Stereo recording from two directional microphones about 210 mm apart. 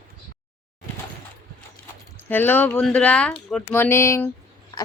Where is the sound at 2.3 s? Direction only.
10° left (ahead or behind).